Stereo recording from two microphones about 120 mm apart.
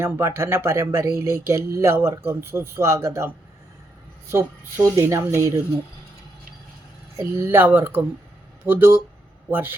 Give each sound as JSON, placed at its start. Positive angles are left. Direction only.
{"t": 0.0, "sound": "speech", "side_deg": -20}
{"t": 7.2, "sound": "speech", "side_deg": -20}